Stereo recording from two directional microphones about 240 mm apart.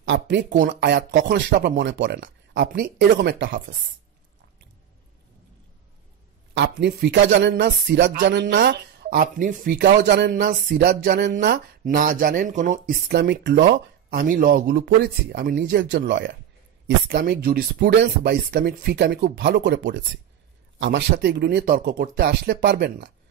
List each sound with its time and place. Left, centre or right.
0.0 s speech: right
6.5 s speech: right
14.1 s speech: right
17.1 s speech: right